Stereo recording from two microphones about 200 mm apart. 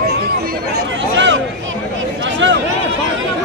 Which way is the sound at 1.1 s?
65° right (ahead or behind).